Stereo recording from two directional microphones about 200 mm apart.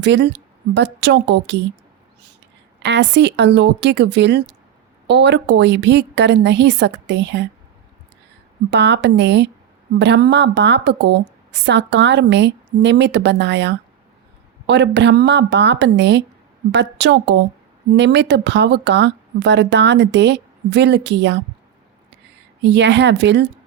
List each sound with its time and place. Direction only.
0.0 s speech: 60° right (ahead or behind)
2.8 s speech: 60° right (ahead or behind)
8.7 s speech: 60° right (ahead or behind)
22.6 s speech: 60° right (ahead or behind)